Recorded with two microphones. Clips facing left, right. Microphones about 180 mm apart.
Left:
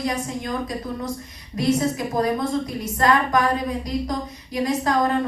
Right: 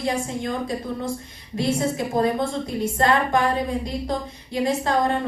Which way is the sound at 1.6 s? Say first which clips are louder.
Left 3 dB; 25° right (ahead or behind).